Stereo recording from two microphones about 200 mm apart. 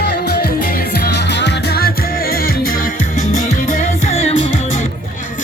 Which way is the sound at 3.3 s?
40° left (ahead or behind).